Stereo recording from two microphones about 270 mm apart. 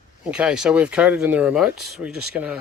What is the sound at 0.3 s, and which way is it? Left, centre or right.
Speech, centre.